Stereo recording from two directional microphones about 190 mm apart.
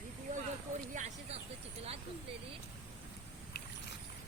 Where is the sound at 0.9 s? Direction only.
35° right (ahead or behind).